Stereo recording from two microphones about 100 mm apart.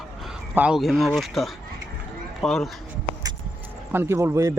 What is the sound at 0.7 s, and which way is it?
Speech, centre (ahead or behind).